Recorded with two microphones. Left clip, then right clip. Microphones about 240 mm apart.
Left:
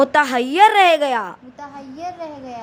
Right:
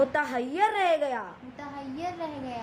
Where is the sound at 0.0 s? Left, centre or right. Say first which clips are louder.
Left 11 dB; left.